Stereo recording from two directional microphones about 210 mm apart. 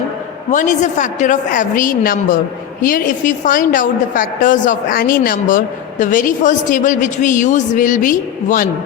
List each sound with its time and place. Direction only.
0.5 s a woman's voice: 35° left (ahead or behind)